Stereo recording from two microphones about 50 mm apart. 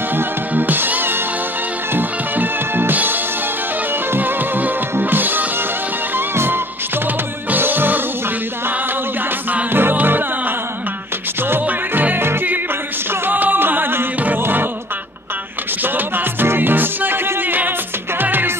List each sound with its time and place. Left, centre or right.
0.1 s music: right
9.5 s music: right
11.6 s music: right
13.3 s music: right
16.3 s music: right